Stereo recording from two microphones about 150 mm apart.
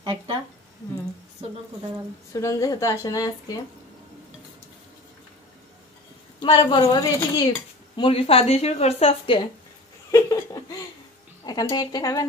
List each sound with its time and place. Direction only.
0.0 s speech: 35° right (ahead or behind)
2.3 s a woman's voice: 20° left (ahead or behind)
6.4 s speech: 35° left (ahead or behind)
10.1 s laughter: 25° left (ahead or behind)
11.4 s a woman's voice: 30° left (ahead or behind)